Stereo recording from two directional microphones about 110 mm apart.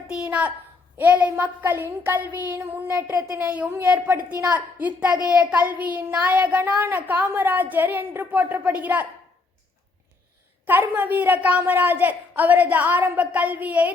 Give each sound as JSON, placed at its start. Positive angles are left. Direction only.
{"t": 0.1, "sound": "a child's voice", "side_deg": -10}
{"t": 10.7, "sound": "a child's voice", "side_deg": -15}